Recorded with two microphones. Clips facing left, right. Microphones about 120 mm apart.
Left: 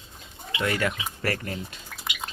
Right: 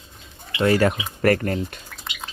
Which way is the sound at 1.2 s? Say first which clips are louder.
Right 11 dB; 50° right (ahead or behind).